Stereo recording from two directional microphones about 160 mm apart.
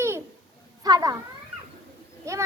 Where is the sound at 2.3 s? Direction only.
20° right (ahead or behind).